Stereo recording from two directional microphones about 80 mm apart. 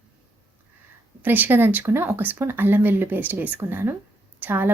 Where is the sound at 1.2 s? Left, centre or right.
Right.